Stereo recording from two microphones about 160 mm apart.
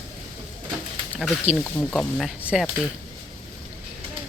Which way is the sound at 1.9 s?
5° left (ahead or behind).